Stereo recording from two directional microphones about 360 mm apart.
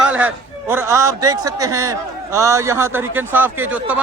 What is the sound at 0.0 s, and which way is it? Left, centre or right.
A man's voice, centre.